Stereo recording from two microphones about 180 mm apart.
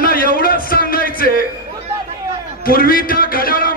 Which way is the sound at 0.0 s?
55° left (ahead or behind).